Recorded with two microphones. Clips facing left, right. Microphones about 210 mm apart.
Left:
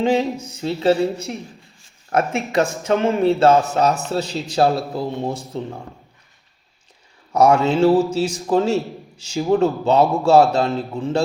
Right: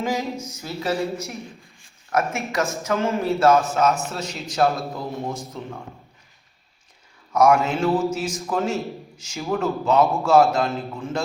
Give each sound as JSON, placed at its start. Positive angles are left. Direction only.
{"t": 0.0, "sound": "a man's voice", "side_deg": 30}
{"t": 7.3, "sound": "a man's voice", "side_deg": 30}